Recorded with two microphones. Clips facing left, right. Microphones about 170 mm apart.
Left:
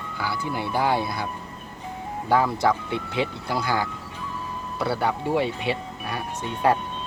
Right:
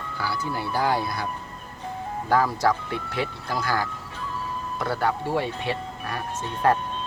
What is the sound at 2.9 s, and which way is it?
Speech, 20° left (ahead or behind).